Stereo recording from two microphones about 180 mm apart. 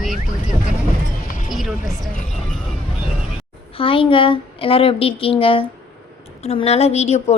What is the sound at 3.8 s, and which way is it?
A woman's voice, 30° left (ahead or behind).